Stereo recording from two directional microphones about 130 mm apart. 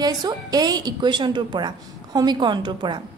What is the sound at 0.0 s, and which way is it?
A woman's voice, 30° right (ahead or behind).